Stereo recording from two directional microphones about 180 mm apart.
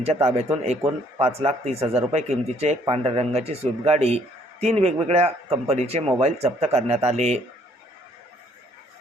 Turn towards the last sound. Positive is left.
turn(degrees=-35)  # may be behind; listen again after turning